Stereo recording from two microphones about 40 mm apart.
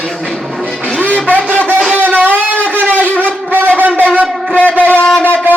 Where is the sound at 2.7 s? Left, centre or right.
Right.